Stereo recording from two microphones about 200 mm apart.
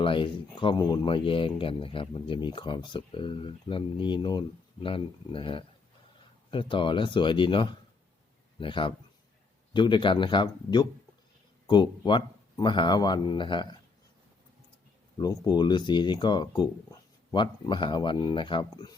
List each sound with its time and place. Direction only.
0.0 s a man's voice: 25° left (ahead or behind)
15.2 s speech: 20° left (ahead or behind)